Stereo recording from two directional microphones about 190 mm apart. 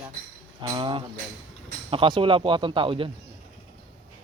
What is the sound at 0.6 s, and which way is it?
Speech, 25° right (ahead or behind).